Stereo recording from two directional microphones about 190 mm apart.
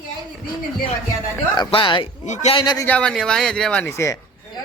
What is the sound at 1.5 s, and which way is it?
Speech, 25° left (ahead or behind).